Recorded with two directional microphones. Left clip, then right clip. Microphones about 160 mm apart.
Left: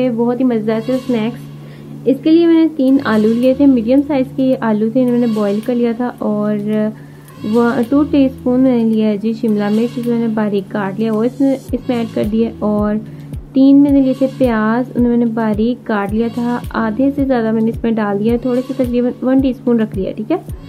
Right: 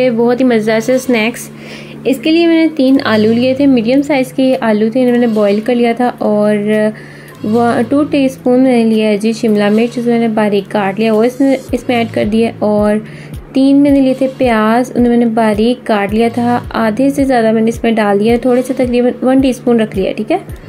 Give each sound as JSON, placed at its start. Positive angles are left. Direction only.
{"t": 0.0, "sound": "a woman's voice", "side_deg": -20}